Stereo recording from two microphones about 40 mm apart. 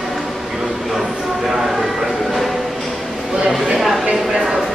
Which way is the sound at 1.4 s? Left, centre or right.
Centre.